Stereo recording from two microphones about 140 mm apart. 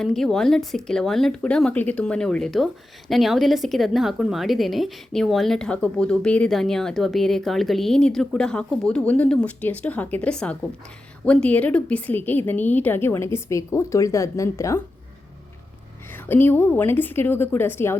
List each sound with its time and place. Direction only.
0.0 s a woman's voice: centre (ahead or behind); by 14.8 s 20° left (ahead or behind)
16.1 s a woman's voice: 15° left (ahead or behind)